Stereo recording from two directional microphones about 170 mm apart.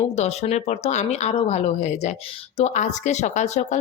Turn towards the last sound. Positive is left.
turn(degrees=45)  # may be behind; listen again after turning